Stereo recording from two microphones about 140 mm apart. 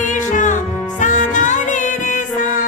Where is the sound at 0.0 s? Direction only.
65° left (ahead or behind).